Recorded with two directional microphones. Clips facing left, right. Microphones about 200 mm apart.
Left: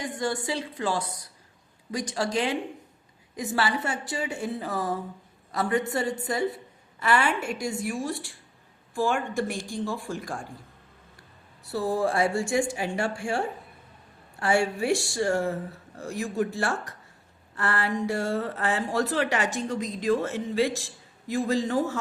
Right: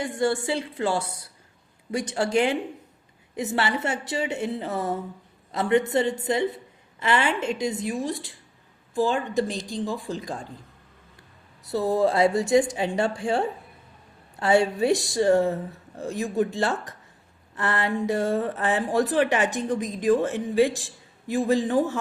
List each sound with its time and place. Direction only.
0.0 s a sound: 25° right (ahead or behind)
2.1 s a woman's voice: 25° right (ahead or behind)
11.7 s a woman's voice: 20° right (ahead or behind)